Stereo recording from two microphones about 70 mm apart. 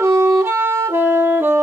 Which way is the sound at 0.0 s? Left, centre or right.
Right.